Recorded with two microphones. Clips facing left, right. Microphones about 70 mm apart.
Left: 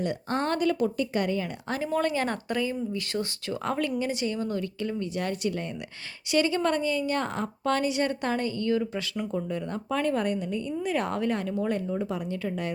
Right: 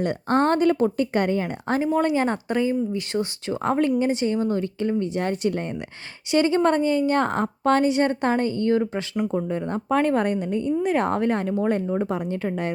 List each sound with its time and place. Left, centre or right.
0.0 s a woman's voice: right
1.8 s a woman's voice: centre; by 12.7 s right